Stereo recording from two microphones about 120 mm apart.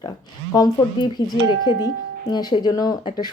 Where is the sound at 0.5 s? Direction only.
30° left (ahead or behind).